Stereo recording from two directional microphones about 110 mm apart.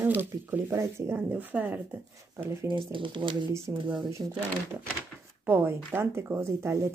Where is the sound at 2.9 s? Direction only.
50° right (ahead or behind).